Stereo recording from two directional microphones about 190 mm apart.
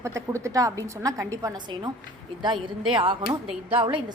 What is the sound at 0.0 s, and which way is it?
A woman's voice, 15° right (ahead or behind).